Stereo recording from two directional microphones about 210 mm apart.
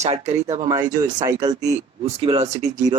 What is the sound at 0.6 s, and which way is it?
Speech, 20° right (ahead or behind).